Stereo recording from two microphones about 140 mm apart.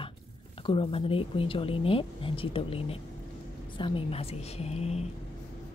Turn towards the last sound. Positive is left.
turn(degrees=50)  # may be behind; listen again after turning